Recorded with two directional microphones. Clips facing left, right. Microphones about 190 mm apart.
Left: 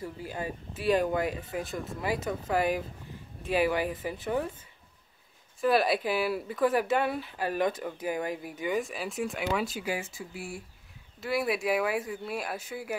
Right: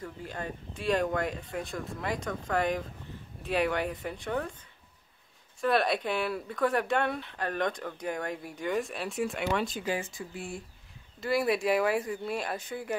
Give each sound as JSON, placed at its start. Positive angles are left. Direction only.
{"t": 0.0, "sound": "speech", "side_deg": 5}
{"t": 5.6, "sound": "speech", "side_deg": 0}